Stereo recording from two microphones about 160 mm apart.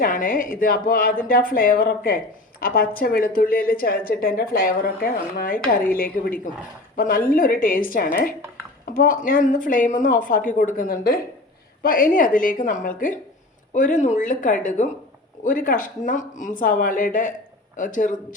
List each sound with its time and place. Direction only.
0.0 s a woman's voice: 60° left (ahead or behind)
11.8 s a woman's voice: 60° left (ahead or behind)